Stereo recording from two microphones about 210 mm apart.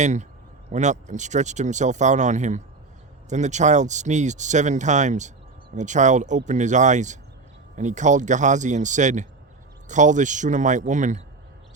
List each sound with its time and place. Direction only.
0.0 s speech: 35° right (ahead or behind)